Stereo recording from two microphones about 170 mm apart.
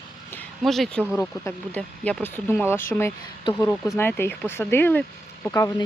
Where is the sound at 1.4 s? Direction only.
10° left (ahead or behind).